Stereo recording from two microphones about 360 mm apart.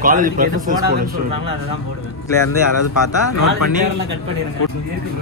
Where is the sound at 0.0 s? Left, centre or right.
Right.